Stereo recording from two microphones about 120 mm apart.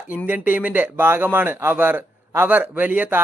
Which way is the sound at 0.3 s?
15° right (ahead or behind).